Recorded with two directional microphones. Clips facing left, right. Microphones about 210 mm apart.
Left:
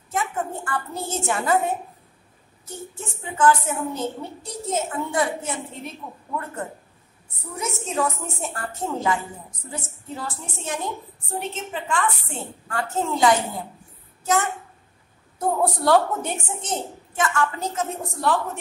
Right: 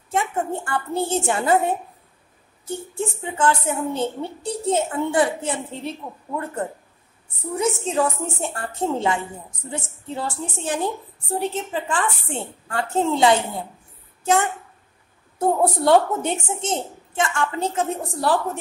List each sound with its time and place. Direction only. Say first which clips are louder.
0.1 s a woman's voice: right 3 dB; 30° right (ahead or behind)
7.6 s a woman's voice: right 4 dB; 30° right (ahead or behind)
15.3 s a woman's voice: right 3 dB; 25° right (ahead or behind)